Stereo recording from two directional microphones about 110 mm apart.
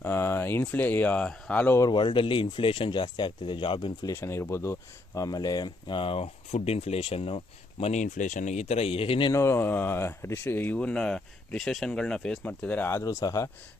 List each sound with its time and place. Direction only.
0.0 s speech: 20° left (ahead or behind)
1.9 s speech: 45° left (ahead or behind)
4.0 s speech: 25° left (ahead or behind); by 9.3 s 55° left (ahead or behind)
9.3 s speech: 25° left (ahead or behind)